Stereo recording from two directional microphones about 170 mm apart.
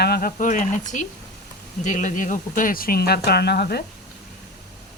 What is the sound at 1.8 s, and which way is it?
Mantra, 45° left (ahead or behind).